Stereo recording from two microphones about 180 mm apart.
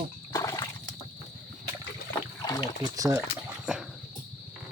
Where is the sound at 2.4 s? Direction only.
20° left (ahead or behind).